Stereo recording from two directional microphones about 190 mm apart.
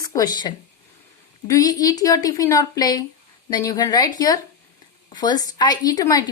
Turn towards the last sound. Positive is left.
turn(degrees=20)  # may be behind; listen again after turning